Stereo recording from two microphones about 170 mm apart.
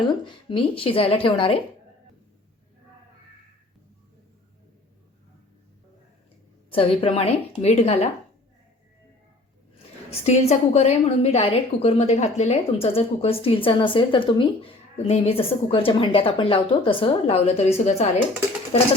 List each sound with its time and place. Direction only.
0.4 s a woman's voice: 30° left (ahead or behind)
6.7 s a woman's voice: 35° left (ahead or behind)
9.7 s a woman's voice: 35° left (ahead or behind)